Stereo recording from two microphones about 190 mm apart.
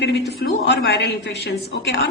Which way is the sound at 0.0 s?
65° left (ahead or behind).